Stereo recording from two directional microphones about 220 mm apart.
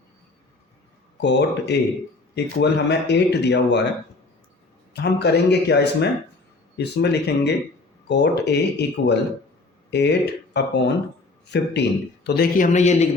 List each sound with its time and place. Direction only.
1.2 s a man's voice: 50° left (ahead or behind)
4.9 s a man's voice: 50° left (ahead or behind); by 13.1 s 30° left (ahead or behind)